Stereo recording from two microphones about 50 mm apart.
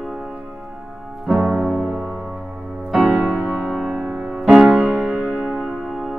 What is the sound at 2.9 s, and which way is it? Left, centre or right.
Music, right.